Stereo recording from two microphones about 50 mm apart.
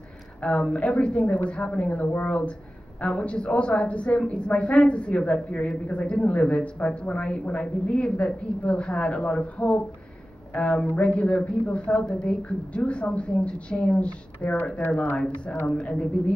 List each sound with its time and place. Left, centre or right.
0.4 s a woman's voice: left